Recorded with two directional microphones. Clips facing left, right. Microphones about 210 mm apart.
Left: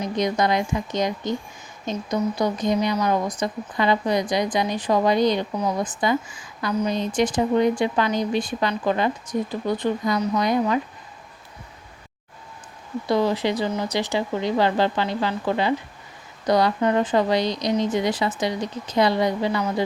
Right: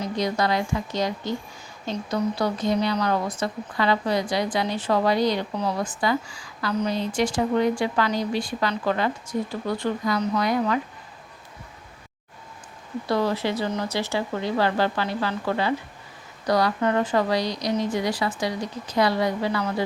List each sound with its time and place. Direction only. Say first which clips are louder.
0.0 s speech: left 2 dB; 20° left (ahead or behind)
13.1 s speech: left 3 dB; 15° left (ahead or behind)